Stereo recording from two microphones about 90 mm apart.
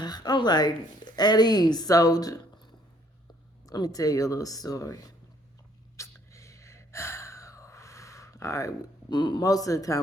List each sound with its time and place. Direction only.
0.0 s a woman's voice: 50° left (ahead or behind)
3.7 s speech: 45° left (ahead or behind)
6.0 s gasp: 35° left (ahead or behind)